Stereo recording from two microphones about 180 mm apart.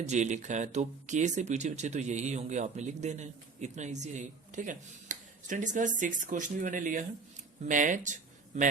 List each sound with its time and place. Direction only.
0.0 s speech: 40° right (ahead or behind)